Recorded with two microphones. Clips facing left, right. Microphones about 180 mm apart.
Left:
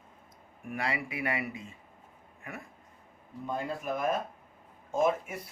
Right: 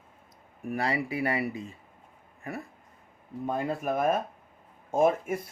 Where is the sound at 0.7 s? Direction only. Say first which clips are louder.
Right 5 dB; 35° right (ahead or behind).